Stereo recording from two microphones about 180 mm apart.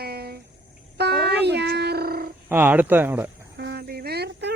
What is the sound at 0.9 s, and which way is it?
Music, 65° right (ahead or behind).